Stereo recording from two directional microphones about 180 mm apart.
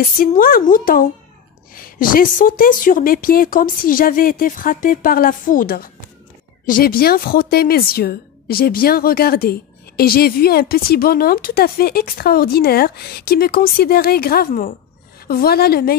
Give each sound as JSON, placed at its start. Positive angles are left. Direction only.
{"t": 0.2, "sound": "a woman's voice", "side_deg": 55}